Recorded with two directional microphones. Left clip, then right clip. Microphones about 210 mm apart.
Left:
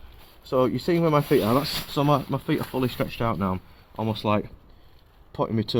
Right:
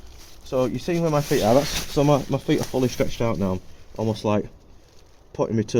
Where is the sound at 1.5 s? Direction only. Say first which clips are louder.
Right 5 dB; 30° left (ahead or behind).